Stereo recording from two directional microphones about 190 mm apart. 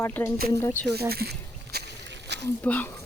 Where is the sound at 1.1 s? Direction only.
55° right (ahead or behind).